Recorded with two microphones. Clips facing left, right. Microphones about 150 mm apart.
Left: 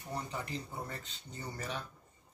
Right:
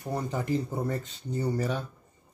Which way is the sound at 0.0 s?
45° right (ahead or behind).